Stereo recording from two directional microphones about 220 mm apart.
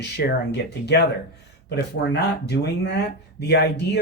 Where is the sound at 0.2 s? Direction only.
50° left (ahead or behind).